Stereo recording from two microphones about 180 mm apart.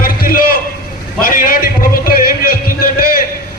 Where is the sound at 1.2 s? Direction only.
50° left (ahead or behind).